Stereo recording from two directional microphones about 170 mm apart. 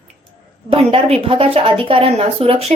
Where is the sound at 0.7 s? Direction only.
35° right (ahead or behind).